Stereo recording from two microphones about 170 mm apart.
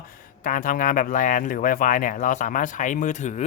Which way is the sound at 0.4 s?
50° left (ahead or behind).